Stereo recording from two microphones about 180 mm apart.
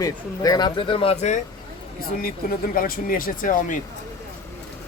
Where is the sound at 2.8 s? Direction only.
50° left (ahead or behind).